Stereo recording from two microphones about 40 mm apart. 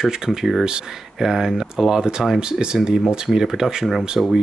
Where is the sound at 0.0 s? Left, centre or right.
Centre.